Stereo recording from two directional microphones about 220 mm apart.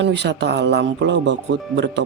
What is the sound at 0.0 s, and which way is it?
A man's voice, 50° right (ahead or behind).